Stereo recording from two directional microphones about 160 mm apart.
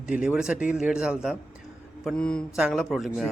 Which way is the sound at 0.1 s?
5° right (ahead or behind).